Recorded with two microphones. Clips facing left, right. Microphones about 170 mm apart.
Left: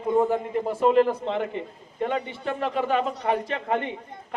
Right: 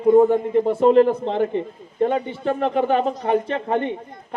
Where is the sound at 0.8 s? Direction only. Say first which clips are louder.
Right 4 dB; 35° right (ahead or behind).